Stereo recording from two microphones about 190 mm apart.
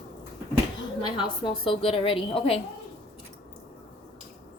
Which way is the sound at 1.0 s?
25° left (ahead or behind).